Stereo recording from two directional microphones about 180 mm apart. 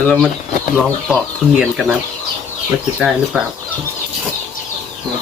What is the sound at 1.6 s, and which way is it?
Speech, 5° right (ahead or behind).